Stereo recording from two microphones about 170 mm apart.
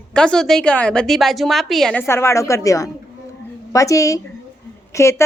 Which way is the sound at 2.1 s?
15° left (ahead or behind).